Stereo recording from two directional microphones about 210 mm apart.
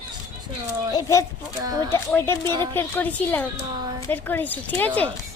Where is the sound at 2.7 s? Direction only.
10° left (ahead or behind).